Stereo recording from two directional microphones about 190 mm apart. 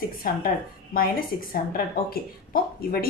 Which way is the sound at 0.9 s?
50° left (ahead or behind).